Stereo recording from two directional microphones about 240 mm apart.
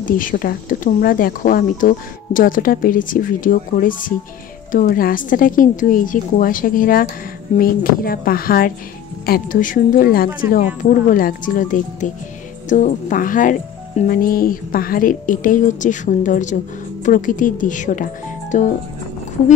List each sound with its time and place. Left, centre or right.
0.0 s speech: left